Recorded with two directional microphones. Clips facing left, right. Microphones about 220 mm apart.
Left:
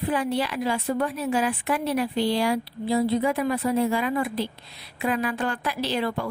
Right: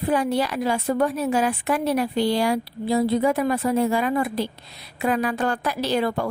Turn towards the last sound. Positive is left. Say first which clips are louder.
# right 4 dB
turn(degrees=-45)  # may be behind; listen again after turning